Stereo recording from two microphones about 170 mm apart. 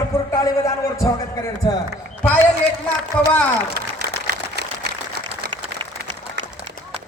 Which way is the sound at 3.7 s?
75° right (ahead or behind).